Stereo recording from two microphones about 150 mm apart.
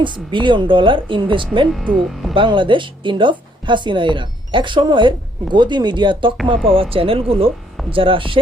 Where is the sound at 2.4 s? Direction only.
35° right (ahead or behind).